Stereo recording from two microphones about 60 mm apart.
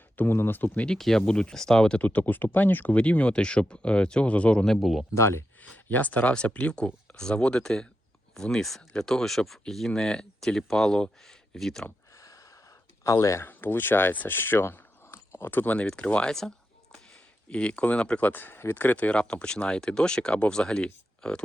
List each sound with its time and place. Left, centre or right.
0.2 s speech: left
0.9 s speech: centre
2.0 s speech: left
4.6 s speech: centre
5.1 s speech: left
5.7 s speech: left; by 11.9 s centre
12.1 s a sound: left
13.1 s speech: left
13.4 s speech: left
15.4 s speech: left
17.5 s speech: left